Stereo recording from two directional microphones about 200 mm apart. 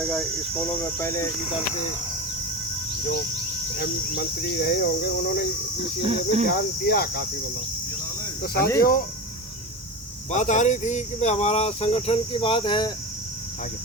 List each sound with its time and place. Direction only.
0.0 s speech: 5° right (ahead or behind)
0.5 s speech: 10° left (ahead or behind)
3.8 s cricket: 50° left (ahead or behind)
6.0 s cricket: 30° right (ahead or behind)
6.5 s cricket: 50° left (ahead or behind)
8.8 s cricket: 45° left (ahead or behind)
10.3 s speech: 35° left (ahead or behind)